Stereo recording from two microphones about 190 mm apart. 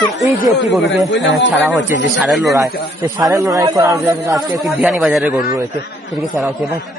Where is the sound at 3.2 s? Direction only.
15° right (ahead or behind).